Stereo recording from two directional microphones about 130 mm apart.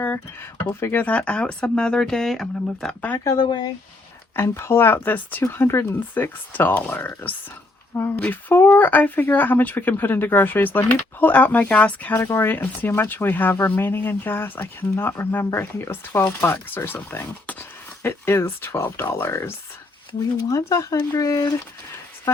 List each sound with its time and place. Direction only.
0.6 s speech: 15° left (ahead or behind)
3.4 s speech: 35° left (ahead or behind)
4.4 s speech: 20° left (ahead or behind)